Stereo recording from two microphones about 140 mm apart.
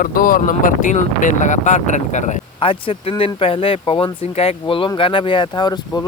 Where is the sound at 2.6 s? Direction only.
40° left (ahead or behind).